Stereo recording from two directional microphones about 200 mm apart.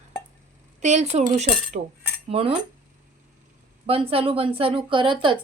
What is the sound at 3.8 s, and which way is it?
A woman's voice, 30° right (ahead or behind).